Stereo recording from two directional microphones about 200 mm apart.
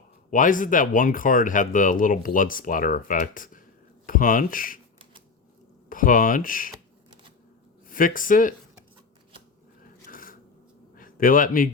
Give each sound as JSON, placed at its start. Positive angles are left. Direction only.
{"t": 0.3, "sound": "speech", "side_deg": 40}
{"t": 5.9, "sound": "speech", "side_deg": 45}
{"t": 7.9, "sound": "speech", "side_deg": 45}
{"t": 10.1, "sound": "a sound", "side_deg": 45}
{"t": 10.9, "sound": "a man's voice", "side_deg": 45}